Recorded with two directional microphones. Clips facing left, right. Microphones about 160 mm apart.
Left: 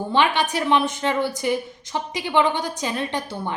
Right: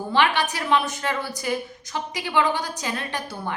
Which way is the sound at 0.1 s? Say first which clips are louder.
Left 1 dB; 20° left (ahead or behind).